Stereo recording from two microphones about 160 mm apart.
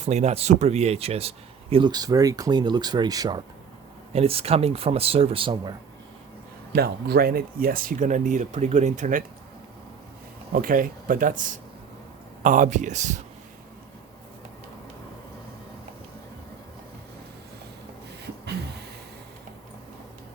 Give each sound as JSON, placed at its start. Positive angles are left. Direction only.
{"t": 0.0, "sound": "speech", "side_deg": -45}
{"t": 1.7, "sound": "speech", "side_deg": -25}
{"t": 4.1, "sound": "a man's voice", "side_deg": -35}
{"t": 6.7, "sound": "speech", "side_deg": -80}
{"t": 10.5, "sound": "speech", "side_deg": -60}